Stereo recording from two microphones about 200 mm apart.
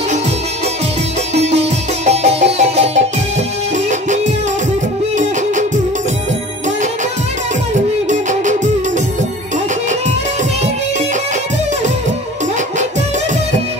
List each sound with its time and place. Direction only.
1.3 s music: 35° right (ahead or behind)
5.1 s music: 35° right (ahead or behind)
8.1 s music: 40° right (ahead or behind)